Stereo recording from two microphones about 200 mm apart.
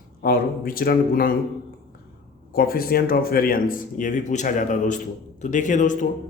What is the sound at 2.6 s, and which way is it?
A man's voice, 50° left (ahead or behind).